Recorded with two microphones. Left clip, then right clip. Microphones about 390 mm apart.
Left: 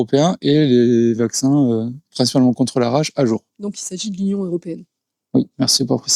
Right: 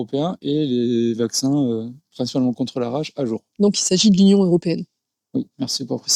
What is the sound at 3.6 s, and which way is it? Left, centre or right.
Speech, right.